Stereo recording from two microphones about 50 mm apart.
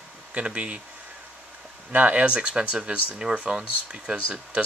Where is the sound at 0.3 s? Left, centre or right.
Right.